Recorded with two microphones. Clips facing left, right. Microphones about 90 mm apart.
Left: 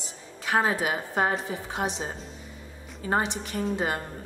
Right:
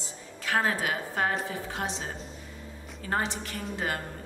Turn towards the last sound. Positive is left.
turn(degrees=20)  # may be behind; listen again after turning